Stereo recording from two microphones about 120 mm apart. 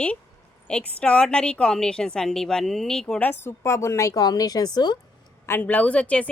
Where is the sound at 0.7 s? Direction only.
10° left (ahead or behind); by 4.9 s 35° left (ahead or behind).